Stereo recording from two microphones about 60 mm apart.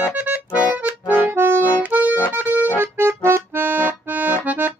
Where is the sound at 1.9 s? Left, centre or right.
Right.